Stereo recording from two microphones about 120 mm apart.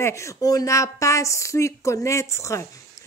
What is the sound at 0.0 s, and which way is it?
A woman's voice, 25° left (ahead or behind).